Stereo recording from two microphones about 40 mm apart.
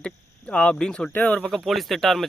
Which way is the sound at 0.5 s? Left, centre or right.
Left.